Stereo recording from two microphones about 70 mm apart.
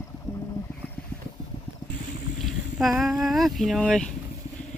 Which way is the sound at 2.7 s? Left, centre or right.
Centre.